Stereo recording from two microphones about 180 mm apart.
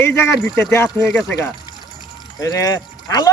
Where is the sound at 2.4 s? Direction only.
20° left (ahead or behind).